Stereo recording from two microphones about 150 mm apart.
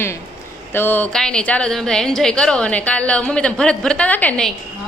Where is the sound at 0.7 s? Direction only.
15° left (ahead or behind).